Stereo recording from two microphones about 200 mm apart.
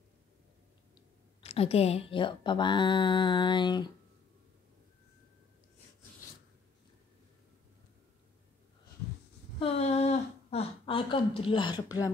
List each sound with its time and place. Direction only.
1.4 s speech: 30° left (ahead or behind)
9.6 s speech: 30° left (ahead or behind)